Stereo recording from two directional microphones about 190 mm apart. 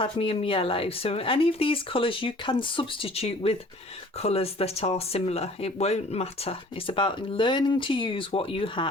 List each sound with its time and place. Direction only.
0.0 s speech: 30° left (ahead or behind)